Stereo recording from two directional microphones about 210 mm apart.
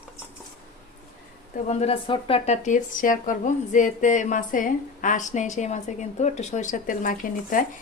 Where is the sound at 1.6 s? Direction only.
30° left (ahead or behind).